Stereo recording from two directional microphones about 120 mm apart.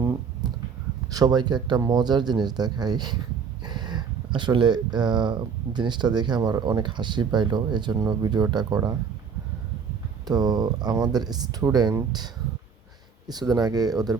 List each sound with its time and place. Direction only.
0.0 s a sound: 25° right (ahead or behind)
1.1 s speech: 35° right (ahead or behind)
10.2 s speech: 35° right (ahead or behind)
13.2 s speech: 35° right (ahead or behind)